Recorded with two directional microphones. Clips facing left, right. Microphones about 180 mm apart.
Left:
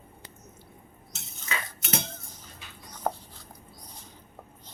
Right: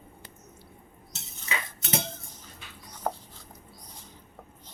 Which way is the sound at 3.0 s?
Centre (ahead or behind).